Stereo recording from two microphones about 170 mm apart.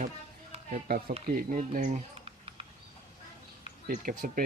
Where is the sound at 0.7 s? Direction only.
60° right (ahead or behind).